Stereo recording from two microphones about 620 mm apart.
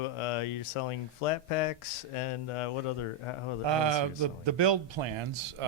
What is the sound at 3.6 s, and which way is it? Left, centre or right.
A man's voice, right.